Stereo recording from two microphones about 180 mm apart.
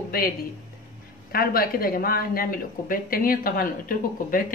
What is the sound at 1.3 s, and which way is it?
Speech, 55° left (ahead or behind).